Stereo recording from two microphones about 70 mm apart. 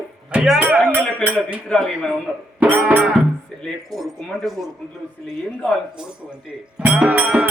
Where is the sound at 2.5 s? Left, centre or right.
Right.